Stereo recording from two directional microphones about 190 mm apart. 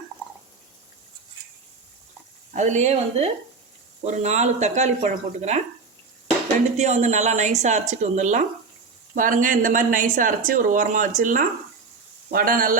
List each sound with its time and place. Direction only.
2.5 s speech: 40° right (ahead or behind)
6.7 s speech: 35° right (ahead or behind)